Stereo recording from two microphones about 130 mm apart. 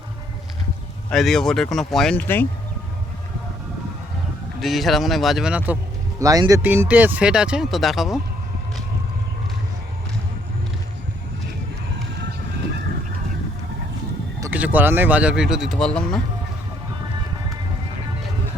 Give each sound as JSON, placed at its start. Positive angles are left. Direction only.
{"t": 1.1, "sound": "speech", "side_deg": 0}
{"t": 2.2, "sound": "speech", "side_deg": 15}
{"t": 4.6, "sound": "speech", "side_deg": 0}
{"t": 6.1, "sound": "speech", "side_deg": -25}
{"t": 6.6, "sound": "speech", "side_deg": -15}
{"t": 14.5, "sound": "speech", "side_deg": -15}